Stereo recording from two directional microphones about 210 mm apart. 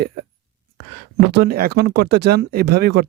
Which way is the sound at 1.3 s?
50° right (ahead or behind).